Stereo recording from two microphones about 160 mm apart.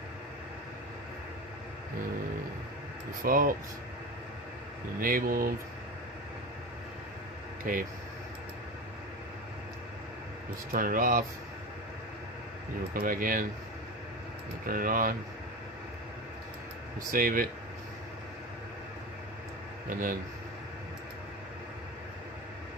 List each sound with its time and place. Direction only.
3.2 s speech: 60° right (ahead or behind)
4.9 s speech: 60° right (ahead or behind)
7.7 s speech: 60° right (ahead or behind)
10.7 s speech: 60° right (ahead or behind)
12.9 s speech: 60° right (ahead or behind)
14.7 s speech: 60° right (ahead or behind)
17.1 s speech: 60° right (ahead or behind)